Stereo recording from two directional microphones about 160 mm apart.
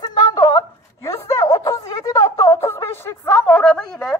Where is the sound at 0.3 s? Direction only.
20° left (ahead or behind).